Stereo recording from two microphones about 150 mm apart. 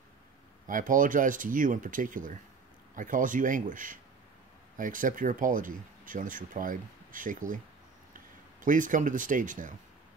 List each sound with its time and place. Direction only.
0.7 s speech: 65° right (ahead or behind)
8.6 s speech: 60° right (ahead or behind)